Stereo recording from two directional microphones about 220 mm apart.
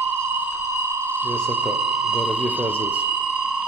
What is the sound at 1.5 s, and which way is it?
Speech, 5° right (ahead or behind).